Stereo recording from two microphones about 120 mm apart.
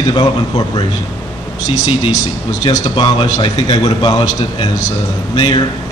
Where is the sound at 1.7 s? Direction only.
80° left.